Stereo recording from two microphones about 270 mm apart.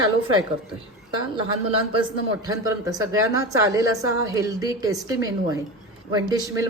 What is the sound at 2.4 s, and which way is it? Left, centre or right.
Speech, centre.